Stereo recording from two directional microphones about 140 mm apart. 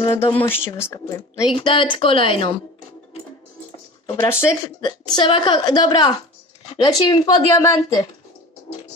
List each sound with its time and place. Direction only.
0.0 s speech: 40° left (ahead or behind)
0.4 s speech: 15° left (ahead or behind)
1.5 s a woman's voice: 35° left (ahead or behind)
4.2 s speech: 20° left (ahead or behind)
4.8 s a woman's voice: 35° left (ahead or behind)